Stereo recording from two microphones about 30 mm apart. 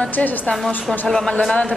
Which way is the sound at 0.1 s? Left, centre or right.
Left.